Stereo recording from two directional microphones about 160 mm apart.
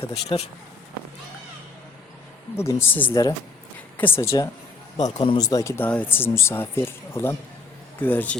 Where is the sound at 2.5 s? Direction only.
15° left (ahead or behind).